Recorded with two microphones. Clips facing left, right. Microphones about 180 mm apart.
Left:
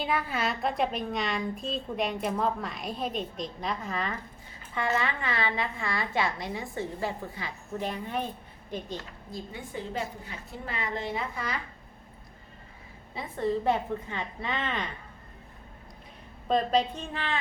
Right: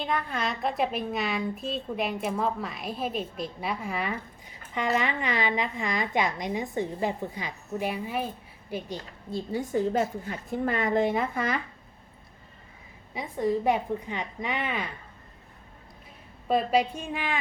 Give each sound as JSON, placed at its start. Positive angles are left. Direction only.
{"t": 0.0, "sound": "a woman's voice", "side_deg": 5}
{"t": 9.3, "sound": "a woman's voice", "side_deg": -40}
{"t": 13.1, "sound": "a woman's voice", "side_deg": -10}
{"t": 16.5, "sound": "a woman's voice", "side_deg": -10}